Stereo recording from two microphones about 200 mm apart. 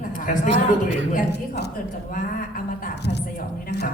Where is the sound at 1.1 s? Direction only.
55° left (ahead or behind).